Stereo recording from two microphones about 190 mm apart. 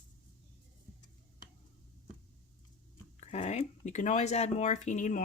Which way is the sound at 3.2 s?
35° left (ahead or behind).